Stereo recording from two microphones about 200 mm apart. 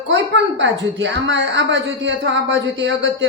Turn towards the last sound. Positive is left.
turn(degrees=-65)  # may be behind; listen again after turning